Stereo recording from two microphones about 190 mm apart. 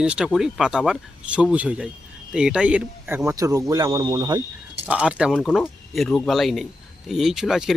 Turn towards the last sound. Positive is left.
turn(degrees=0)  # may be behind; listen again after turning